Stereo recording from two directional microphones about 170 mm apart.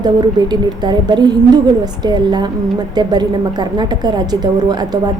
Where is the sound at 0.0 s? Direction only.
25° right (ahead or behind).